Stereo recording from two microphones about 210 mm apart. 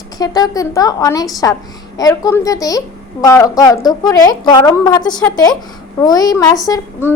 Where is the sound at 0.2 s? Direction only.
20° left (ahead or behind).